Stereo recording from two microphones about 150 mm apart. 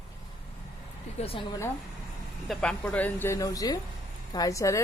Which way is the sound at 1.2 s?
40° left (ahead or behind).